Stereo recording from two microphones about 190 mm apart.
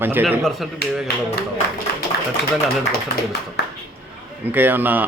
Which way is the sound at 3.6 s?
60° left (ahead or behind).